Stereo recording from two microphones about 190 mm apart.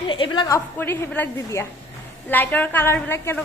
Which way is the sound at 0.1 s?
25° left (ahead or behind).